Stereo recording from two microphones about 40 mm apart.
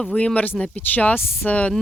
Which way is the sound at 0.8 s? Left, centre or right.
Left.